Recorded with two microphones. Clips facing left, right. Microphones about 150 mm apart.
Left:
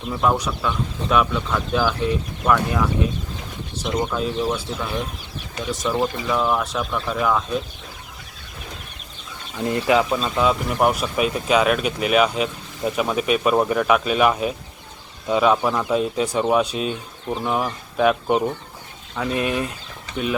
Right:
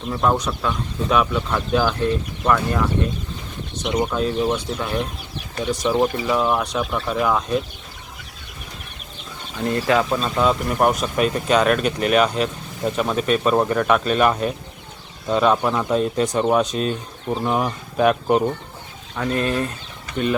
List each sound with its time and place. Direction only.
0.1 s speech: centre (ahead or behind)
1.1 s speech: centre (ahead or behind)
9.6 s speech: 20° left (ahead or behind)
10.0 s speech: centre (ahead or behind)